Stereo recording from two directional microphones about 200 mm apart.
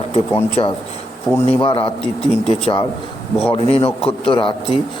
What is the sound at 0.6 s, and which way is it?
A man's voice, 30° left (ahead or behind).